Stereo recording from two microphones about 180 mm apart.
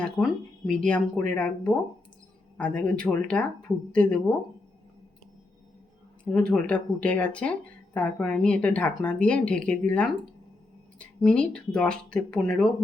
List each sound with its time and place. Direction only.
0.0 s speech: 5° left (ahead or behind)
6.3 s speech: 5° left (ahead or behind)